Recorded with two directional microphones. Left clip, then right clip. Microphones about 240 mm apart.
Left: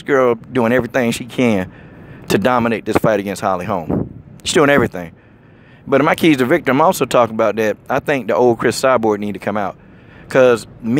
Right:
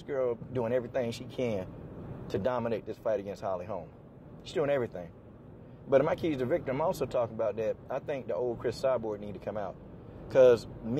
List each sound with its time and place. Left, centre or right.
0.0 s speech: left